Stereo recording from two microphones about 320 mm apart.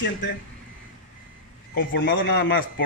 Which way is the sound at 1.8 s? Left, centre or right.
Left.